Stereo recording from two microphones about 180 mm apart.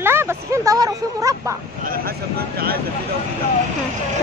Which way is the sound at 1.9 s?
60° right (ahead or behind).